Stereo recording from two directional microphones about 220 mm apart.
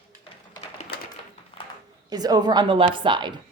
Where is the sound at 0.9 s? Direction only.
50° left (ahead or behind).